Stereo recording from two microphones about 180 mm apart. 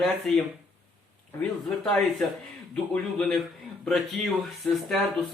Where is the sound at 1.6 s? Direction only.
Centre (ahead or behind).